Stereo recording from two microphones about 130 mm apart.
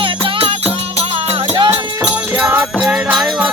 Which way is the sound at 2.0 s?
10° right (ahead or behind).